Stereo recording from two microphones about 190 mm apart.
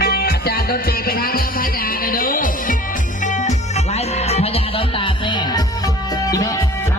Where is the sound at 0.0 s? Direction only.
55° left (ahead or behind); by 6.6 s 20° left (ahead or behind).